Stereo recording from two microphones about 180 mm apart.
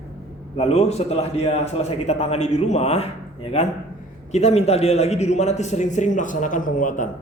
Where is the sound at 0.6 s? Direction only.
35° left (ahead or behind).